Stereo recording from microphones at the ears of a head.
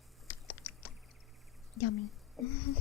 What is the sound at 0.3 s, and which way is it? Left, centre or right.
Chewing, left.